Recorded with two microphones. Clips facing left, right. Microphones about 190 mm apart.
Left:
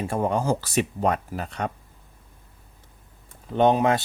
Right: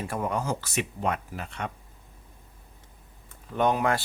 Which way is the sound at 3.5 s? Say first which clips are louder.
Left 5 dB; 25° left (ahead or behind).